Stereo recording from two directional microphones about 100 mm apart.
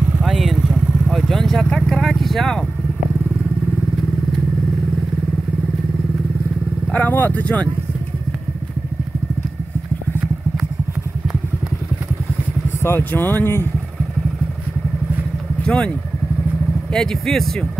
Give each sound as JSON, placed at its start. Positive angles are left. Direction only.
{"t": 0.2, "sound": "vehicle", "side_deg": 0}
{"t": 6.9, "sound": "speech", "side_deg": 15}
{"t": 12.8, "sound": "speech", "side_deg": 20}
{"t": 15.6, "sound": "speech", "side_deg": 10}
{"t": 16.9, "sound": "speech", "side_deg": 5}